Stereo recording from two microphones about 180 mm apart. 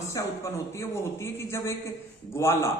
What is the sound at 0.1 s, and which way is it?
A man's voice, 15° left (ahead or behind).